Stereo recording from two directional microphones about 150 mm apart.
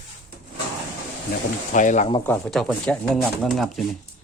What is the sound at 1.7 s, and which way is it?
Speech, 55° left (ahead or behind).